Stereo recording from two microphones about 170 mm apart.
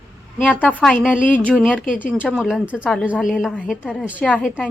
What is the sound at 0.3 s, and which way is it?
A woman's voice, 10° left (ahead or behind).